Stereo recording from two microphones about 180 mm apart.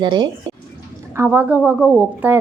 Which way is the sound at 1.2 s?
10° right (ahead or behind).